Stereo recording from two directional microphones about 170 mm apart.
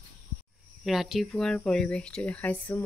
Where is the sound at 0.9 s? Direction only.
Centre (ahead or behind).